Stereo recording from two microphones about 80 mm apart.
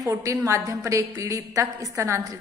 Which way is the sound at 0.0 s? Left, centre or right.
Right.